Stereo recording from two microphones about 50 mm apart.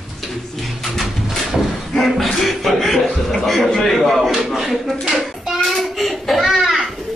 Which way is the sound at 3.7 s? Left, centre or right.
Centre.